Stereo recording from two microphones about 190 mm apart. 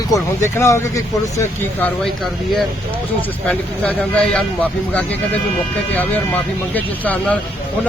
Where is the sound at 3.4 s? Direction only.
5° left (ahead or behind).